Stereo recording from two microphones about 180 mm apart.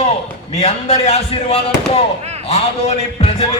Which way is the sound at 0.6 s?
35° left (ahead or behind).